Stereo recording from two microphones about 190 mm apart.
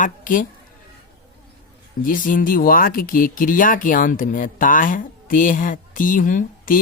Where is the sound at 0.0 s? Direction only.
45° left (ahead or behind).